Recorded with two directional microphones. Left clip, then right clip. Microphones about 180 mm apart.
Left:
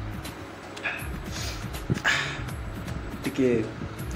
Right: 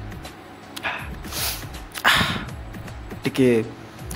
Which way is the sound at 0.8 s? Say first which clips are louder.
Right 4 dB; 40° right (ahead or behind).